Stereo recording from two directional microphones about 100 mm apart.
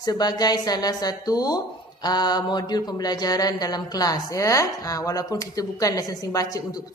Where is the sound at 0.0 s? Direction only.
40° left (ahead or behind).